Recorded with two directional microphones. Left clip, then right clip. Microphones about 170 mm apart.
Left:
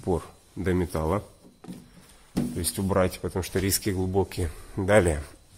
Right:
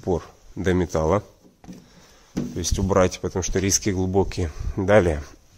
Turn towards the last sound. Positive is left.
turn(degrees=-30)  # may be behind; listen again after turning